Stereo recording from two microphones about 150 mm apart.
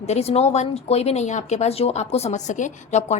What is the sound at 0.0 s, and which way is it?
A woman's voice, 45° left (ahead or behind).